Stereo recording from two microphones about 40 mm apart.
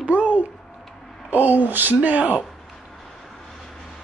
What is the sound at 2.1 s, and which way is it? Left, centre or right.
Speech, right.